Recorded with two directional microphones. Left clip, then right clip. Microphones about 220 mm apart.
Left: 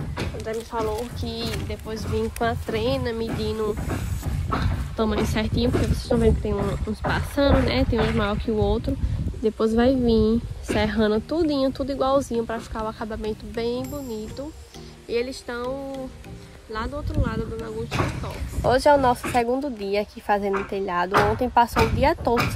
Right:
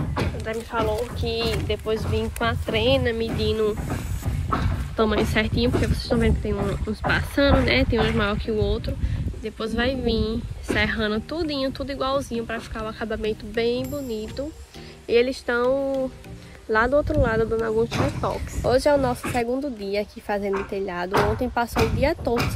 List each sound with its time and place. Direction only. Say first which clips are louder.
0.9 s speech: right 4 dB; 10° left (ahead or behind)
4.9 s speech: right 3 dB; 5° left (ahead or behind)